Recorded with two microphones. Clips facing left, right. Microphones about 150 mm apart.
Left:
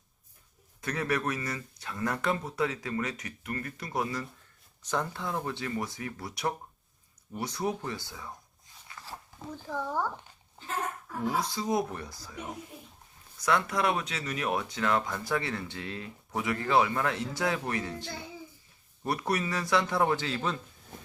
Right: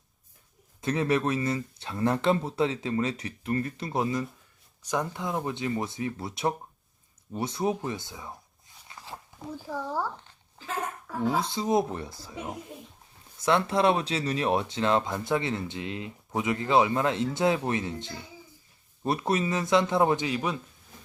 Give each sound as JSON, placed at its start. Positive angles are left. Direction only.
{"t": 0.8, "sound": "speech", "side_deg": -25}
{"t": 8.9, "sound": "a sound", "side_deg": -25}
{"t": 9.5, "sound": "speech", "side_deg": -10}
{"t": 11.3, "sound": "speech", "side_deg": -25}
{"t": 13.4, "sound": "speech", "side_deg": -25}